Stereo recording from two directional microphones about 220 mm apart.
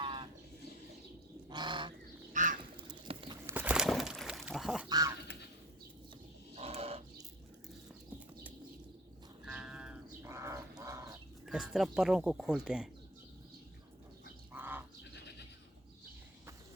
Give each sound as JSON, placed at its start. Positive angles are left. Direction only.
{"t": 0.0, "sound": "livestock", "side_deg": -20}
{"t": 1.5, "sound": "goose", "side_deg": -20}
{"t": 2.3, "sound": "bird", "side_deg": -35}
{"t": 2.7, "sound": "duck", "side_deg": -20}
{"t": 3.4, "sound": "duck", "side_deg": -10}
{"t": 4.9, "sound": "speech", "side_deg": -15}
{"t": 6.6, "sound": "a sound", "side_deg": -25}
{"t": 9.5, "sound": "livestock", "side_deg": -5}
{"t": 11.4, "sound": "speech", "side_deg": 0}
{"t": 14.5, "sound": "bird", "side_deg": -10}
{"t": 15.1, "sound": "goat", "side_deg": 50}